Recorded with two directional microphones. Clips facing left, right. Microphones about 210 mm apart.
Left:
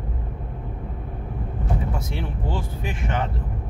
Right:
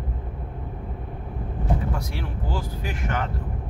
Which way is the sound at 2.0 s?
25° left (ahead or behind).